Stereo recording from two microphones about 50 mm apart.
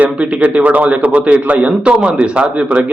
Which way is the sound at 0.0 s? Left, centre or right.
Right.